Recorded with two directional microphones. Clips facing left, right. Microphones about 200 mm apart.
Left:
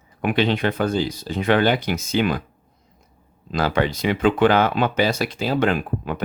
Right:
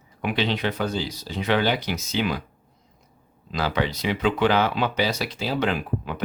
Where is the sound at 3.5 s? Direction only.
50° left (ahead or behind).